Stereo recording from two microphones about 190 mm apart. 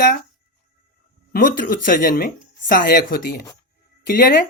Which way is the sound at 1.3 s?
45° left (ahead or behind).